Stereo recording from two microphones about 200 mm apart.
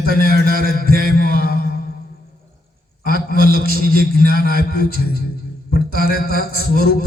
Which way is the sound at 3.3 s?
45° right (ahead or behind).